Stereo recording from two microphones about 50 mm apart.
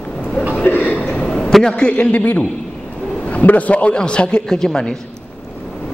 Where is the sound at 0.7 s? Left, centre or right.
Left.